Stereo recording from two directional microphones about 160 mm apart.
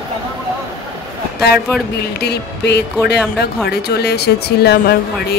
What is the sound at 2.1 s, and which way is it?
Speech, 90° left.